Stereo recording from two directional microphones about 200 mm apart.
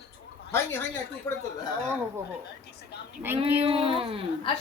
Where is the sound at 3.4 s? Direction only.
10° right (ahead or behind).